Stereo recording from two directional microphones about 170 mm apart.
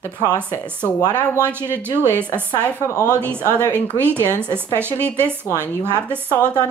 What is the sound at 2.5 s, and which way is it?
Speech, 15° left (ahead or behind).